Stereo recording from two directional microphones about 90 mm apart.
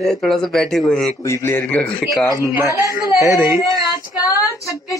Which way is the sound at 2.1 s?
45° left (ahead or behind).